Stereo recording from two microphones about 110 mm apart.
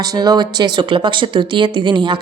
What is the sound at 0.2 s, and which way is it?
Speech, 40° right (ahead or behind).